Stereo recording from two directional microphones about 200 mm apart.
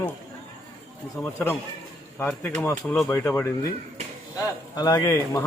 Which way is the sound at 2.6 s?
10° left (ahead or behind).